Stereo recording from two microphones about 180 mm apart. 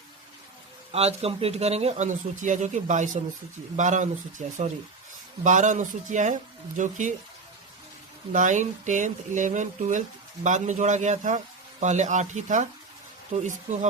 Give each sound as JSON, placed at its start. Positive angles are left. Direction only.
{"t": 0.9, "sound": "a man's voice", "side_deg": -35}
{"t": 8.3, "sound": "a man's voice", "side_deg": -45}